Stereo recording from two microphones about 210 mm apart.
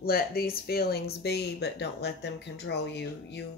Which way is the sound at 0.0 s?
45° left (ahead or behind).